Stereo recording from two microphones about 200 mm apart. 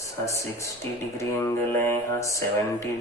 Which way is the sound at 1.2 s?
15° left (ahead or behind).